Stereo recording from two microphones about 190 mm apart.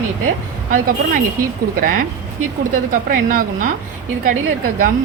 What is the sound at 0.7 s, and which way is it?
Speech, 45° right (ahead or behind).